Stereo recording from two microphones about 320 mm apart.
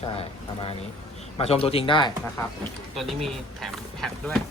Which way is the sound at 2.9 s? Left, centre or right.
Centre.